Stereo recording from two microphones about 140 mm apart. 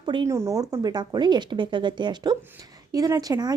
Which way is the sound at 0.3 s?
20° right (ahead or behind).